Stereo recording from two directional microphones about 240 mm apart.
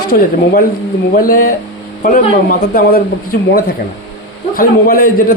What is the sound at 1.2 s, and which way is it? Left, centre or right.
A man's voice, left.